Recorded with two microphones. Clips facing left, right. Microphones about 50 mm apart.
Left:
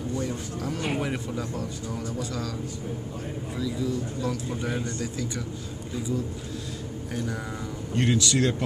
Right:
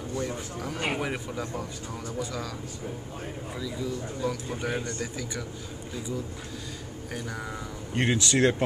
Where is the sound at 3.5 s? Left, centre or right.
Centre.